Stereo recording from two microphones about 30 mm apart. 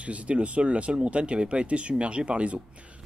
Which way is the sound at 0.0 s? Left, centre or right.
Right.